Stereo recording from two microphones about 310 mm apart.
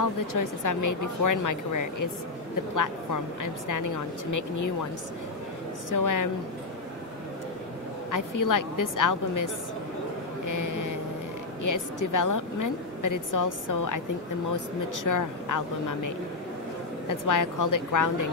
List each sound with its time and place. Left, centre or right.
0.0 s a woman's voice: left
5.9 s a woman's voice: left
8.1 s a woman's voice: left
10.4 s vehicle: left
11.6 s a woman's voice: left
15.0 s a woman's voice: left
17.1 s a woman's voice: left